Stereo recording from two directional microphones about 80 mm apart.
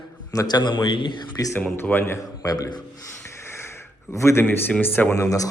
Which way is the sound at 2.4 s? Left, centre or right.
Left.